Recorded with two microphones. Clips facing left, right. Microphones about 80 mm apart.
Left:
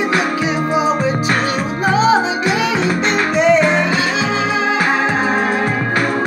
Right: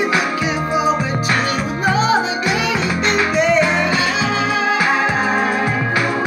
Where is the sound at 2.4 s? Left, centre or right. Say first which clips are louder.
Left 2 dB; left.